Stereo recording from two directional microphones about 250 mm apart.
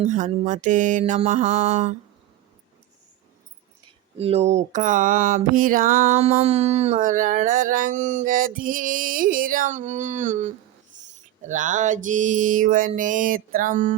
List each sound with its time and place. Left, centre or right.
0.0 s mantra: right
4.2 s mantra: right